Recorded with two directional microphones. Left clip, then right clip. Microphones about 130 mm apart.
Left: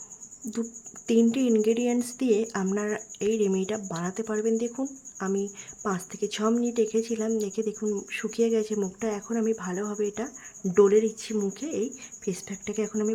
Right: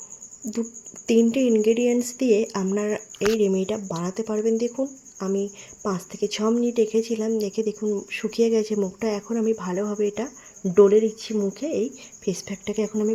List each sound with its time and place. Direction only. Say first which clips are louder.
1.0 s speech: right 4 dB; 15° right (ahead or behind)